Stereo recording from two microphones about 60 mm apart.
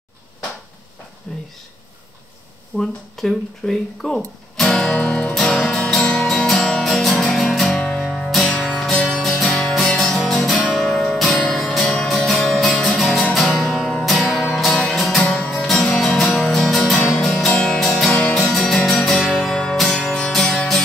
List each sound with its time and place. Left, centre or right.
1.3 s speech: centre
2.8 s speech: centre
4.6 s music: centre
7.7 s music: centre
8.0 s music: centre
8.9 s music: centre
9.2 s music: centre
15.1 s music: centre
15.5 s music: centre
17.5 s music: centre
17.7 s music: centre